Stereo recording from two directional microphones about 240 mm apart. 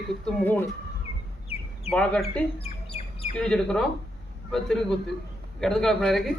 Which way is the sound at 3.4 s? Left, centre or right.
Centre.